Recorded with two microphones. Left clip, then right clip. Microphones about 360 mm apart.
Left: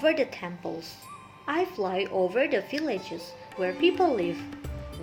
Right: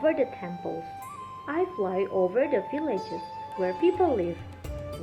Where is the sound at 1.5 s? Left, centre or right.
Left.